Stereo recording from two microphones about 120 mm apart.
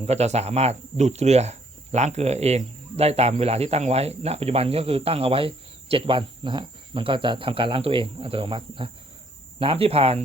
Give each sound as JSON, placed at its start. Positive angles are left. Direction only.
{"t": 0.0, "sound": "speech", "side_deg": -65}